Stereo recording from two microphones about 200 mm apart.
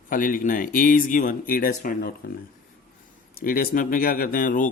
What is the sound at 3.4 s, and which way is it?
Speech, 45° left (ahead or behind).